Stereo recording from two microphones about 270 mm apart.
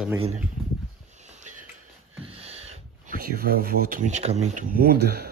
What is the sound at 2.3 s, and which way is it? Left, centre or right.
Speech, right.